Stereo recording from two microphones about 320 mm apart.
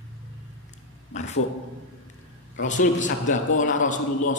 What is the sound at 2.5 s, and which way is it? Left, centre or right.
A man's voice, left.